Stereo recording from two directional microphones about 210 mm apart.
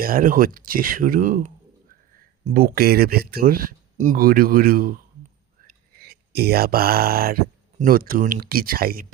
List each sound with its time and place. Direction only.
0.0 s speech: 40° right (ahead or behind)
2.5 s speech: 45° right (ahead or behind)